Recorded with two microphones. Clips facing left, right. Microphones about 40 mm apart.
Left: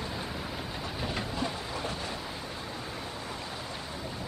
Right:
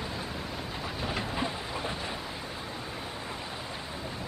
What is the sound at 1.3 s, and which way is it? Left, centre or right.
Train, centre.